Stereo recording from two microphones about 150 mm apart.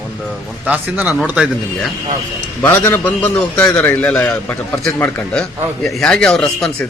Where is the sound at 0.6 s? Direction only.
10° right (ahead or behind).